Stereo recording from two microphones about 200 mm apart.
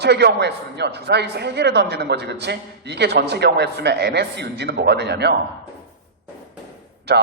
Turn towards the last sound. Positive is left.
turn(degrees=-55)  # may be behind; listen again after turning